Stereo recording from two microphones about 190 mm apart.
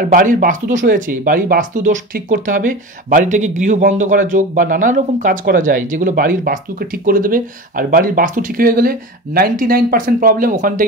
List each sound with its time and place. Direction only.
0.0 s speech: 45° right (ahead or behind)